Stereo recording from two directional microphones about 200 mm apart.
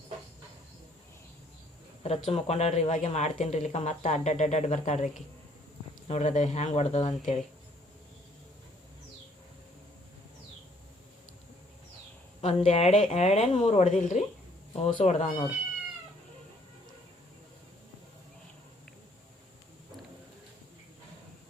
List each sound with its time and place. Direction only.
2.0 s speech: 30° left (ahead or behind)
6.1 s speech: 35° left (ahead or behind)
12.4 s speech: 30° left (ahead or behind)